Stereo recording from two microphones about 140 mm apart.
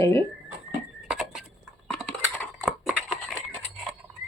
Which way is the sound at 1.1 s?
5° right (ahead or behind).